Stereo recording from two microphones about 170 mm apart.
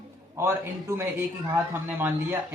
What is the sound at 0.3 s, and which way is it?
Speech, 15° right (ahead or behind).